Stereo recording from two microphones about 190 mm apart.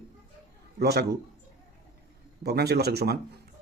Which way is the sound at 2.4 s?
60° right (ahead or behind).